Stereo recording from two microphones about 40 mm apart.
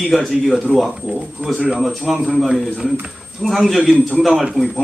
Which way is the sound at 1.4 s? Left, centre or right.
Right.